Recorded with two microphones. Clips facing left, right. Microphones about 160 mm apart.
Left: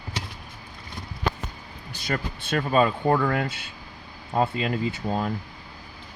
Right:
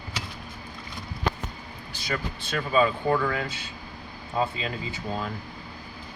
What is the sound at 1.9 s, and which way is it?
Speech, 50° left (ahead or behind).